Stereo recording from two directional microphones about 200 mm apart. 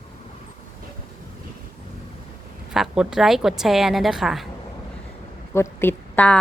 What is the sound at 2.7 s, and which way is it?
A woman's voice, 5° right (ahead or behind).